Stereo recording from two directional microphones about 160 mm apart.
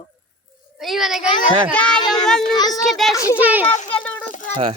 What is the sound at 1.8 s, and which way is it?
Children playing, 30° left (ahead or behind).